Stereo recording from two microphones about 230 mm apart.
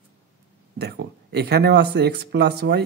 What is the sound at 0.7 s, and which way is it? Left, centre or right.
Speech, right.